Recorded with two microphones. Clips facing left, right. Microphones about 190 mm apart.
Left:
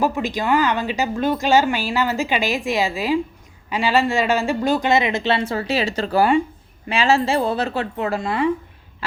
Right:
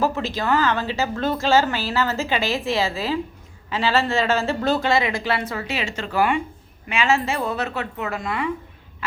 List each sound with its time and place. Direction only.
0.0 s a woman's voice: 15° left (ahead or behind)